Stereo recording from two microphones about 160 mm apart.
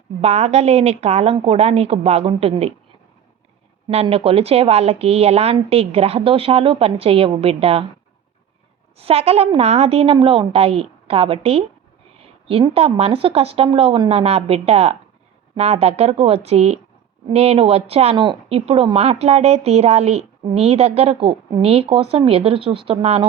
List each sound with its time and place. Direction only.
0.2 s speech: 40° right (ahead or behind)
3.8 s speech: 35° right (ahead or behind)
9.0 s speech: 40° right (ahead or behind)